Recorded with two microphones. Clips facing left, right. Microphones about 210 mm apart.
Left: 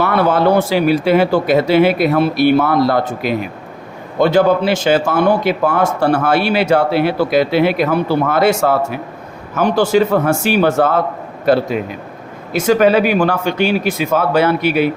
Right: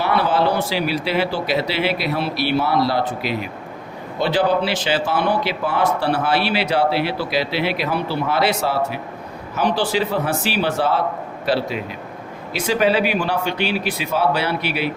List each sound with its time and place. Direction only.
0.0 s a man's voice: 50° left (ahead or behind)